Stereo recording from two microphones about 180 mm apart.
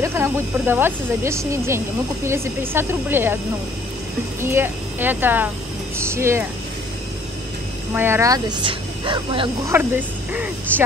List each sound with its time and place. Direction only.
0.0 s speech: 15° right (ahead or behind)
4.4 s speech: 15° right (ahead or behind)
7.9 s speech: 10° right (ahead or behind); by 9.7 s 30° right (ahead or behind)
9.7 s speech: 10° right (ahead or behind)